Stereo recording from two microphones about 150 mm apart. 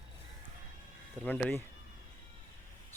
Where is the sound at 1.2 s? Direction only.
10° left (ahead or behind).